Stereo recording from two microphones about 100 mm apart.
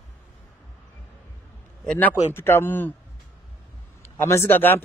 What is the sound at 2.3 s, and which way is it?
Speech, 25° left (ahead or behind).